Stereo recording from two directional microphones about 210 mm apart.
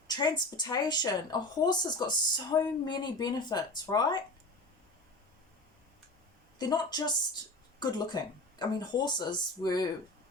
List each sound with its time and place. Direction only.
0.1 s speech: 20° left (ahead or behind)
6.6 s speech: 20° left (ahead or behind)